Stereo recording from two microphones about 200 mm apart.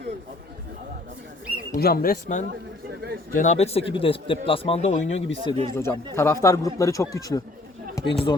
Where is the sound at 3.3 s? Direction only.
40° left (ahead or behind).